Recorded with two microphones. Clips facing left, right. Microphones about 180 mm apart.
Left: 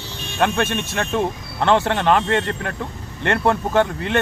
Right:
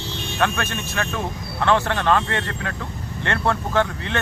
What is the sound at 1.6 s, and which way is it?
Speech, 20° left (ahead or behind).